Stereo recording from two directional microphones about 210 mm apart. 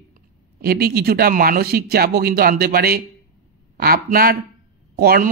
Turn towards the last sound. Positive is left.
turn(degrees=-45)  # may be behind; listen again after turning